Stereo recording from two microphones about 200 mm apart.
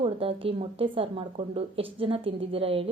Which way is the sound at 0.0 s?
30° right (ahead or behind).